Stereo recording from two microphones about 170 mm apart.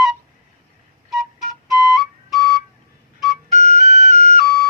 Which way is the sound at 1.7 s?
Centre (ahead or behind).